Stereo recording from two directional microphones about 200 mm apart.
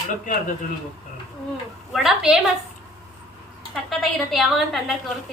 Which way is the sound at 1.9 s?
Centre (ahead or behind).